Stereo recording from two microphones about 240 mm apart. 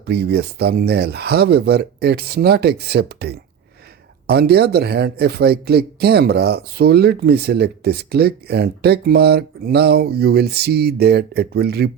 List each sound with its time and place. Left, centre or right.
0.0 s speech: right